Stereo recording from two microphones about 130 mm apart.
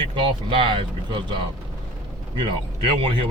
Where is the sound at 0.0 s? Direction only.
40° right (ahead or behind).